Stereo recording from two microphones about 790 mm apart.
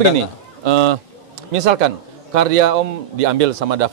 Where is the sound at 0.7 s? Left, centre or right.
Right.